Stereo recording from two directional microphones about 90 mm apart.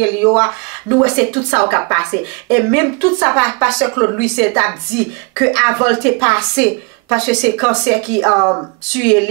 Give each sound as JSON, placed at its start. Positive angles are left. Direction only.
{"t": 0.0, "sound": "speech", "side_deg": -15}
{"t": 8.9, "sound": "speech", "side_deg": -15}